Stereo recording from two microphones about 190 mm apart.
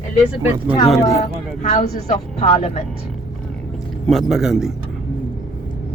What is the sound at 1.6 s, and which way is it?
Speech, 35° left (ahead or behind).